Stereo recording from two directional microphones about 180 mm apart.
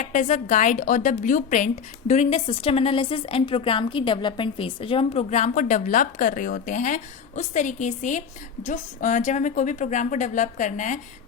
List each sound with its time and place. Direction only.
0.0 s a woman's voice: 45° left (ahead or behind)